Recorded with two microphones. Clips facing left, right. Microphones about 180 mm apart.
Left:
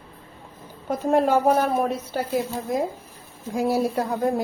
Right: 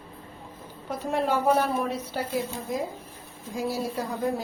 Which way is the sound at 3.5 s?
55° left (ahead or behind).